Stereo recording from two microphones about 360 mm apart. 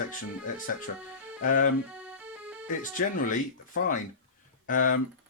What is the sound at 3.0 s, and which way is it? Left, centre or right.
Speech, left.